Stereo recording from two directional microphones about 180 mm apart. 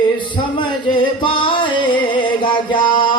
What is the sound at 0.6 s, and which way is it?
Music, 25° left (ahead or behind).